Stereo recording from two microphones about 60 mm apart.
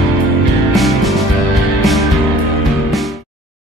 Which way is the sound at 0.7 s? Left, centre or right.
Centre.